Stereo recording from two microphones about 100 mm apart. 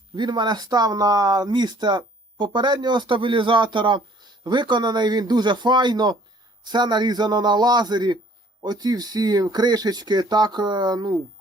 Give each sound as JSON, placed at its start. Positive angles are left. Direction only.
{"t": 0.2, "sound": "speech", "side_deg": -50}